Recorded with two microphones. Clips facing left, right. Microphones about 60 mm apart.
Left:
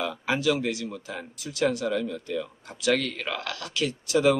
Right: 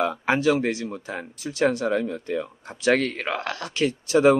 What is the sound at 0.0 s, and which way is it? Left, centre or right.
Speech, right.